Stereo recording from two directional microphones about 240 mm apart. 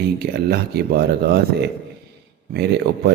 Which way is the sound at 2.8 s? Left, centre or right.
Right.